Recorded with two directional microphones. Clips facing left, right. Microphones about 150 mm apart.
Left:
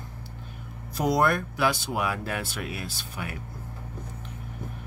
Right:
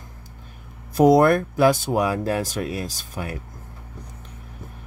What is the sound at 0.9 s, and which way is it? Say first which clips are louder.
Speech: right 9 dB; 50° right (ahead or behind).